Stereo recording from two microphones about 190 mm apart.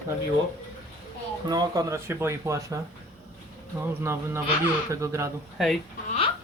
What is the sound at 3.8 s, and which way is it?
Speech, 15° right (ahead or behind).